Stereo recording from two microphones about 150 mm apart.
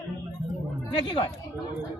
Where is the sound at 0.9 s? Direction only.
30° left (ahead or behind).